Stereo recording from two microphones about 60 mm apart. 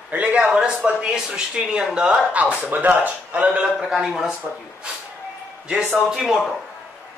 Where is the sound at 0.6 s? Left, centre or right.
Centre.